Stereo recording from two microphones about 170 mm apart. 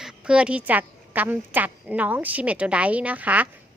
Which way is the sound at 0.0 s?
5° right (ahead or behind).